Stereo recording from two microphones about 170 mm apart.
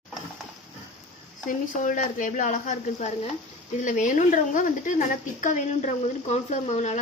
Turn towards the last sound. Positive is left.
turn(degrees=45)  # may be behind; listen again after turning